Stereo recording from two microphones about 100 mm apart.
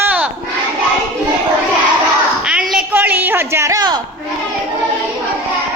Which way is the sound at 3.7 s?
40° right (ahead or behind).